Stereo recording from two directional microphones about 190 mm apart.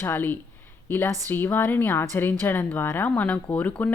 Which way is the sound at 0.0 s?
10° left (ahead or behind).